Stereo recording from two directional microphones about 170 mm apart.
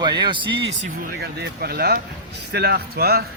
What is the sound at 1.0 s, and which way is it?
Speech, 65° right (ahead or behind).